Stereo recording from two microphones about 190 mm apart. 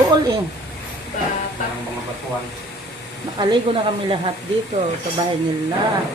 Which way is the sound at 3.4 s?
25° right (ahead or behind).